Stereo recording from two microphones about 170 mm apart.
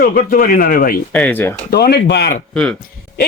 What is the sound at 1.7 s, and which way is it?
Speech, 70° left (ahead or behind).